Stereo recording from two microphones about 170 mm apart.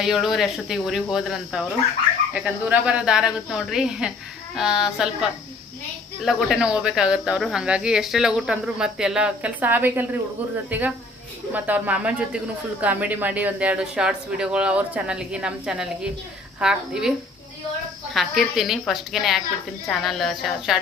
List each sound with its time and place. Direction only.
0.0 s speech: centre (ahead or behind)